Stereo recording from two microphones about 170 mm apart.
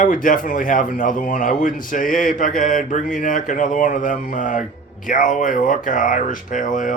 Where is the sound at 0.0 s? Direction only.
50° left (ahead or behind).